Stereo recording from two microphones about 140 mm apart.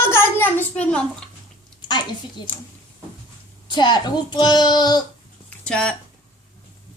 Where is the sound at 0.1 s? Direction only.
15° left (ahead or behind).